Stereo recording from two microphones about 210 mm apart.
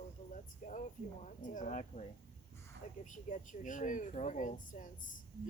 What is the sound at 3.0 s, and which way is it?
Speech, 35° left (ahead or behind).